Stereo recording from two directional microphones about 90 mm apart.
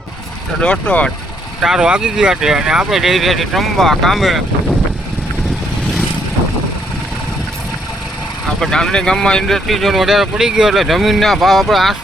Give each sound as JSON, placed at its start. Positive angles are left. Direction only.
{"t": 0.6, "sound": "speech", "side_deg": 15}
{"t": 1.6, "sound": "speech", "side_deg": -5}
{"t": 8.6, "sound": "speech", "side_deg": 5}